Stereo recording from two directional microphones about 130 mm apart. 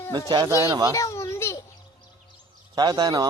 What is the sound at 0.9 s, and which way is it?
Speech, 25° left (ahead or behind).